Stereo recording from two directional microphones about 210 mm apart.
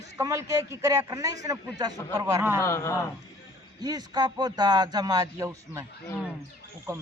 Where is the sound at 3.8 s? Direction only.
20° right (ahead or behind).